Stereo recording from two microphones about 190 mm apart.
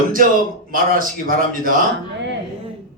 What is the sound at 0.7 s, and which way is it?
Speech, 50° right (ahead or behind).